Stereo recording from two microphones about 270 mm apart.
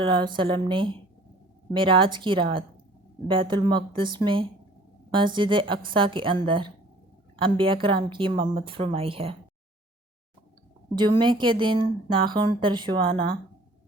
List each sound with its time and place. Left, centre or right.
0.0 s a woman's voice: centre
11.2 s speech: centre